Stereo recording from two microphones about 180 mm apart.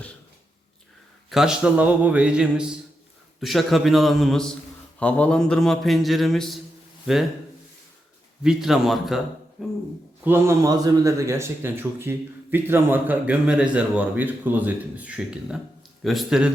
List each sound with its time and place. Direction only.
1.3 s a man's voice: 5° right (ahead or behind)
8.4 s a man's voice: 5° right (ahead or behind)
10.2 s a man's voice: 15° right (ahead or behind)